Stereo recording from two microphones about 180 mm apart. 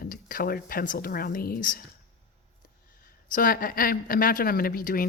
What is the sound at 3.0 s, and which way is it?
Speech, 55° left (ahead or behind).